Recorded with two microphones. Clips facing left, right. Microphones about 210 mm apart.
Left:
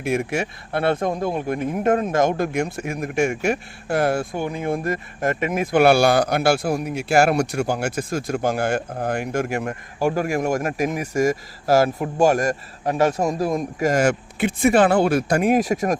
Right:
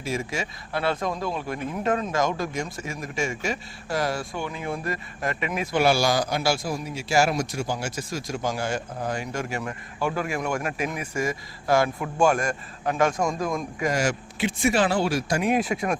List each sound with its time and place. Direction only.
0.0 s speech: 60° left (ahead or behind); by 16.0 s 40° left (ahead or behind)